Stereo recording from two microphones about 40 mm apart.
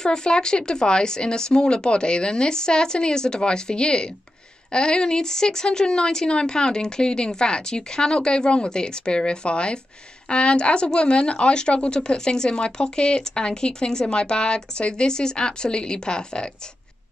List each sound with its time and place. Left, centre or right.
0.0 s speech: centre